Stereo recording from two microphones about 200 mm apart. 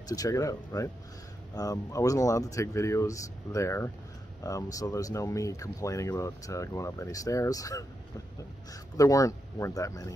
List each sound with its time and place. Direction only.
0.1 s speech: 15° left (ahead or behind)
8.9 s speech: 15° left (ahead or behind)